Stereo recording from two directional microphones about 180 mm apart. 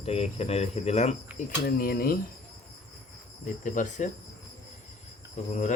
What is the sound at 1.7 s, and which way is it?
Speech, 55° left (ahead or behind).